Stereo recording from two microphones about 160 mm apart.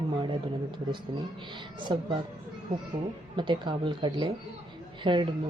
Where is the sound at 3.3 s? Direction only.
30° right (ahead or behind).